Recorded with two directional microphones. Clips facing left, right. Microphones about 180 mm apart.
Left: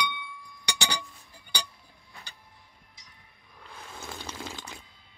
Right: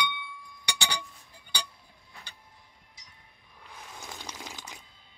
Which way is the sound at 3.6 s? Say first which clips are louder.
Left 2 dB; 15° right (ahead or behind).